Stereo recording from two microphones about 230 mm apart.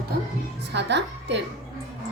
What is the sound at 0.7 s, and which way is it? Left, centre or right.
Speech, right.